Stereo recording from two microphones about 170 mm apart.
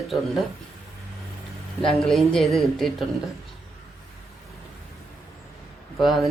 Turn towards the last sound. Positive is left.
turn(degrees=0)  # may be behind; listen again after turning